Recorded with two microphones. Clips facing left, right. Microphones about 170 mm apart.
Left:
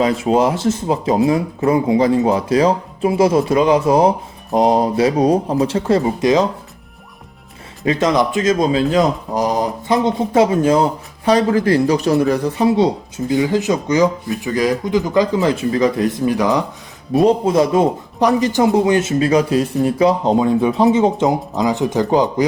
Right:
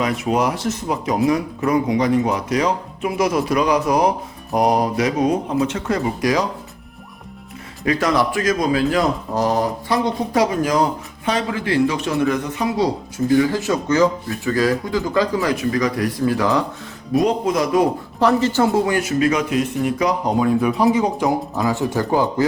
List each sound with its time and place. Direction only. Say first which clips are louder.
0.0 s speech: left 5 dB; 30° left (ahead or behind)
7.9 s speech: left 3 dB; 20° left (ahead or behind)
11.3 s speech: left 7 dB; 40° left (ahead or behind); by 16.6 s 15° left (ahead or behind)
17.2 s speech: left 5 dB; 30° left (ahead or behind)
18.2 s speech: left 2 dB; 15° left (ahead or behind)